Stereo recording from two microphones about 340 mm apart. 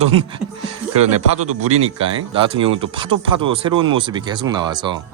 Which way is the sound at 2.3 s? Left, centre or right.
Centre.